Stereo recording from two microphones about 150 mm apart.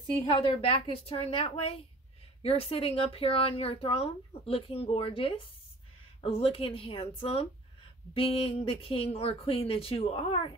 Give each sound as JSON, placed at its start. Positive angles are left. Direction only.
{"t": 0.2, "sound": "speech", "side_deg": 35}